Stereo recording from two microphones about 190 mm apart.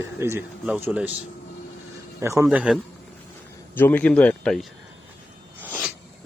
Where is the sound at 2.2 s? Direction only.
15° right (ahead or behind).